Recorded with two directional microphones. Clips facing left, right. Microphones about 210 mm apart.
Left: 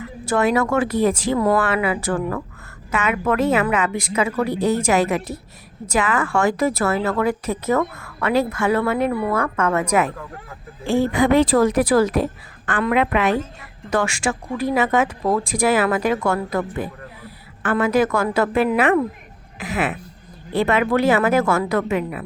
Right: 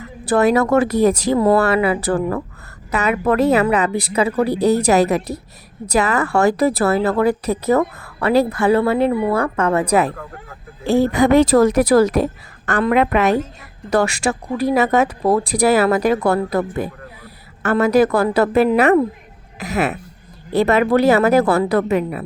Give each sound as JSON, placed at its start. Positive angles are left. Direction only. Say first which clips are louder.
{"t": 0.0, "sound": "a woman's voice", "louder": "right 4 dB", "side_deg": -40}